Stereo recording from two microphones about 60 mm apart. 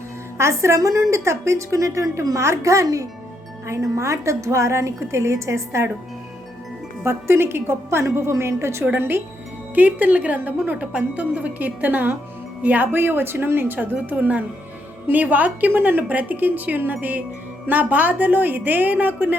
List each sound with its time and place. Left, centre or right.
0.3 s a woman's voice: right
1.1 s a woman's voice: right
7.0 s a woman's voice: right
9.0 s speech: right
9.7 s a woman's voice: right
12.9 s a woman's voice: right